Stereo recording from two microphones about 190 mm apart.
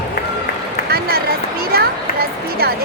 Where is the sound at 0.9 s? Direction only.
55° right (ahead or behind).